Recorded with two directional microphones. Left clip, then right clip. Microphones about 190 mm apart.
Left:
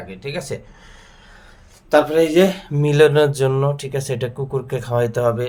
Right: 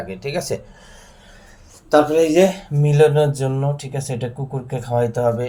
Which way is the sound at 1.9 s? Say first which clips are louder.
Even; 10° left (ahead or behind).